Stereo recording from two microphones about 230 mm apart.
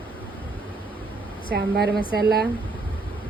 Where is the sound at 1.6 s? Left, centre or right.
Right.